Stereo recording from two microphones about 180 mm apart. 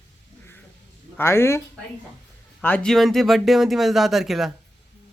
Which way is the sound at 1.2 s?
15° left (ahead or behind).